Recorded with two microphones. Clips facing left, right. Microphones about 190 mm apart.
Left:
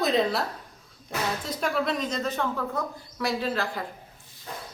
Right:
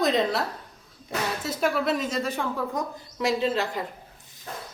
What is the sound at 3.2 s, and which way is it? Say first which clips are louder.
Speech: right 3 dB; 20° right (ahead or behind).